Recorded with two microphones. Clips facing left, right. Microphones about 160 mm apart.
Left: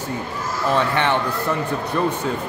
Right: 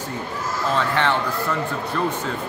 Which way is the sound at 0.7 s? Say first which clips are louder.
Left 1 dB; 15° left (ahead or behind).